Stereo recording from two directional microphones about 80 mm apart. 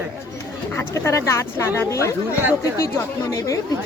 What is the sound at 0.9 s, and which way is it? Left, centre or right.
Speech, left.